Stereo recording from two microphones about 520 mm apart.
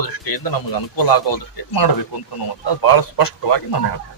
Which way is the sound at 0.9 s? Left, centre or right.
Left.